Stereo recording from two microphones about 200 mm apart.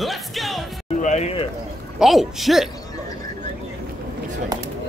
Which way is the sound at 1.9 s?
Centre (ahead or behind).